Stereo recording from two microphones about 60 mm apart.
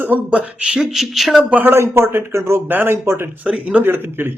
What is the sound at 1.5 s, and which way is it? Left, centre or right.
Speech, right.